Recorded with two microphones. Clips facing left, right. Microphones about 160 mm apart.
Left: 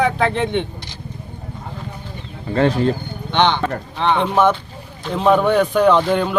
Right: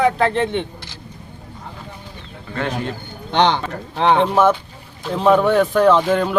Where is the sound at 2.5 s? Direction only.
35° left (ahead or behind).